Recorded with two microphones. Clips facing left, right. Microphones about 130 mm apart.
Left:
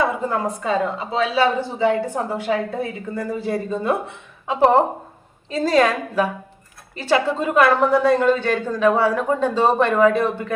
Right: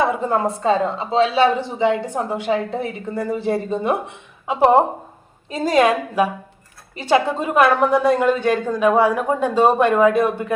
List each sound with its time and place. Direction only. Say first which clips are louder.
0.0 s a woman's voice: right 2 dB; 25° right (ahead or behind)